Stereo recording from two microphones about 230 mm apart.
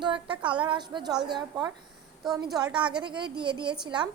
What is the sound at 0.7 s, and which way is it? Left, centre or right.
A woman's voice, centre.